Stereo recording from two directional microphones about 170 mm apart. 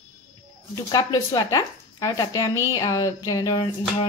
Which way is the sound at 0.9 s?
20° left (ahead or behind).